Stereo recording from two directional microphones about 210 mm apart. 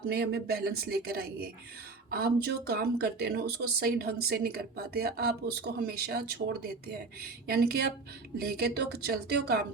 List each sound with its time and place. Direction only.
0.0 s speech: 50° right (ahead or behind)